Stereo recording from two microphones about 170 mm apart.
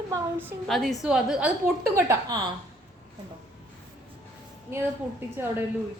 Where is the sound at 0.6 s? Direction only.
Centre (ahead or behind).